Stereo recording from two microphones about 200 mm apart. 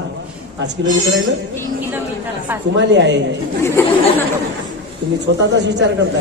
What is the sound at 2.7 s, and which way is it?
Speech, 60° right (ahead or behind).